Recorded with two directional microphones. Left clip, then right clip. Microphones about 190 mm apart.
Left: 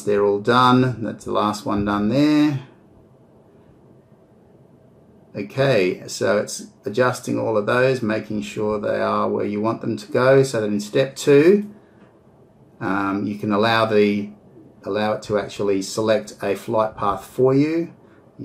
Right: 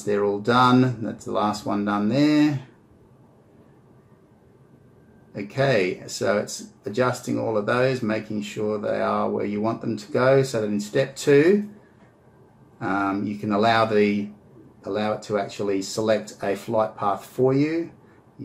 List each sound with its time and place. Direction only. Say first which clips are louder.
0.0 s speech: left 5 dB; 15° left (ahead or behind)
5.3 s speech: left 3 dB; 15° left (ahead or behind)
12.7 s speech: left 2 dB; 15° left (ahead or behind)